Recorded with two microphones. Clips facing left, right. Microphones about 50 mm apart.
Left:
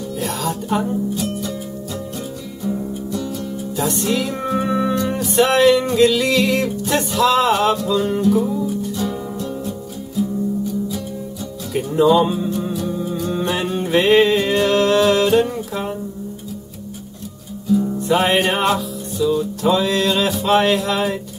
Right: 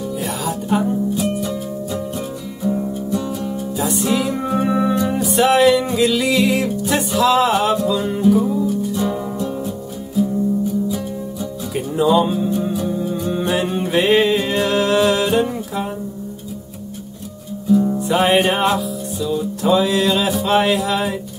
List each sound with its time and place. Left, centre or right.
0.2 s music: centre
2.7 s music: centre
8.9 s music: centre
11.7 s music: centre
12.7 s music: centre
17.6 s music: centre